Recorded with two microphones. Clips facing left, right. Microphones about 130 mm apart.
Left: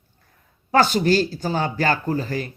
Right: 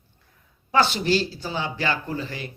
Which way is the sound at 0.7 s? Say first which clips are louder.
Left 4 dB; 45° left (ahead or behind).